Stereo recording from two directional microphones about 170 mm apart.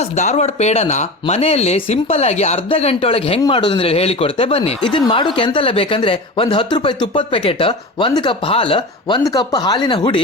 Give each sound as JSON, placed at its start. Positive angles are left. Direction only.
{"t": 0.2, "sound": "speech", "side_deg": 45}